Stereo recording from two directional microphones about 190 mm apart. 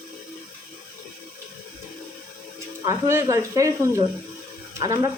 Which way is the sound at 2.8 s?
15° right (ahead or behind).